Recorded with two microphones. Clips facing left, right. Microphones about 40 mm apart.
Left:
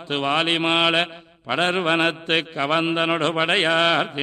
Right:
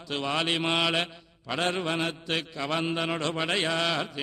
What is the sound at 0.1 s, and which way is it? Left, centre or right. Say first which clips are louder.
Mantra: left 7 dB; left.